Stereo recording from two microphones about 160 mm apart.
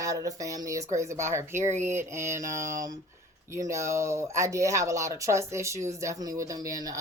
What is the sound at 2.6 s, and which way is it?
Speech, 50° right (ahead or behind).